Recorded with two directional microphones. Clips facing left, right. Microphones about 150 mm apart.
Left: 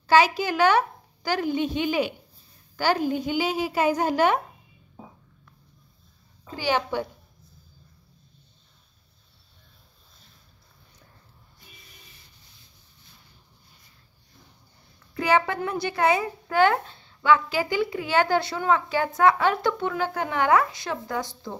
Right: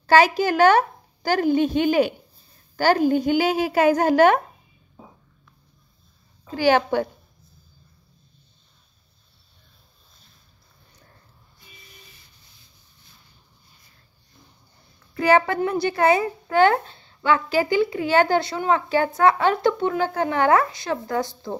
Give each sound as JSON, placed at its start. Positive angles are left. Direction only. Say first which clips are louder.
{"t": 0.0, "sound": "a woman's voice", "louder": "right 3 dB", "side_deg": -45}
{"t": 3.1, "sound": "a sound", "louder": "right 6 dB", "side_deg": -50}
{"t": 4.1, "sound": "a woman's voice", "louder": "right 6 dB", "side_deg": -60}
{"t": 6.6, "sound": "a woman's voice", "louder": "right 7 dB", "side_deg": -65}
{"t": 15.2, "sound": "a woman's voice", "louder": "right 5 dB", "side_deg": -35}
{"t": 21.5, "sound": "speech", "louder": "right 6 dB", "side_deg": -15}